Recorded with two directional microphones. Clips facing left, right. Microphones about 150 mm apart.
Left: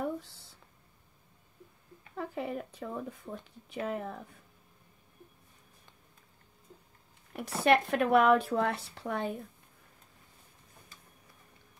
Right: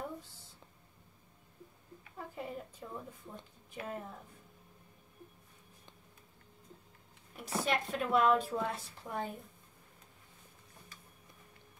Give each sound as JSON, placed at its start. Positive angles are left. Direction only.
{"t": 2.1, "sound": "speech", "side_deg": 75}
{"t": 7.3, "sound": "speech", "side_deg": 65}